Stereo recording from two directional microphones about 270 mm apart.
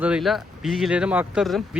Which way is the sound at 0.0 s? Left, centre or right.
Centre.